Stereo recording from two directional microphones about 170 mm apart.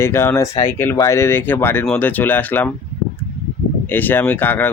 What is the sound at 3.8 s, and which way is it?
Speech, 10° left (ahead or behind).